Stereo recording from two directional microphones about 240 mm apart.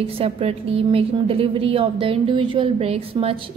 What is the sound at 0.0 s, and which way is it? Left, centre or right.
A woman's voice, right.